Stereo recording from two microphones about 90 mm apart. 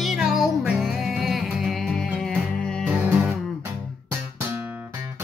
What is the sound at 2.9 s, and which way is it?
Music, 20° right (ahead or behind).